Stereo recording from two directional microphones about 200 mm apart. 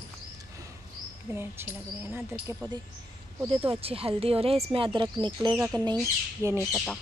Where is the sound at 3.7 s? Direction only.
30° right (ahead or behind).